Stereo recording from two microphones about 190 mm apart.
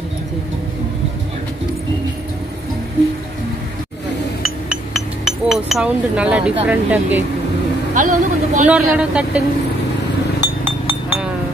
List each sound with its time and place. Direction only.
4.6 s chink: centre (ahead or behind)
6.6 s speech: 10° right (ahead or behind)
7.9 s speech: 40° right (ahead or behind)
8.6 s speech: 5° right (ahead or behind)
10.4 s chink: 10° right (ahead or behind)